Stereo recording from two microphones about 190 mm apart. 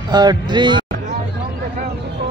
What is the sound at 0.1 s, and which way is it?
Speech, 20° right (ahead or behind).